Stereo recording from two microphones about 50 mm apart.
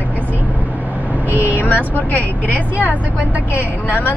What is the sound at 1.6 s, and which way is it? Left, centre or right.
Speech, left.